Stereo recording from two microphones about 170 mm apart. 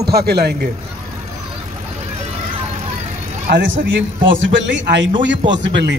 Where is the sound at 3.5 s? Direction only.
90° right.